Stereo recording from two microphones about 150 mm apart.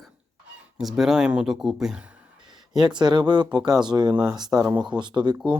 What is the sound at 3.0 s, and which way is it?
Speech, 30° right (ahead or behind).